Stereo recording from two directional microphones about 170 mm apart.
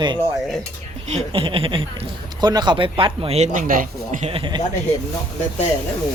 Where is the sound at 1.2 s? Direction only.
35° right (ahead or behind); by 4.2 s 50° right (ahead or behind).